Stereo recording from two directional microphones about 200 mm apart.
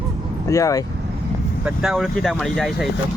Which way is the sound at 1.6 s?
5° right (ahead or behind).